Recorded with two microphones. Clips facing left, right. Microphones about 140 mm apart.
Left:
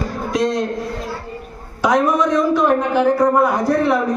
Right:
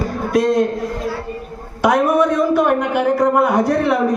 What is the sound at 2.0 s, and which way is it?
A man's voice, 60° right (ahead or behind).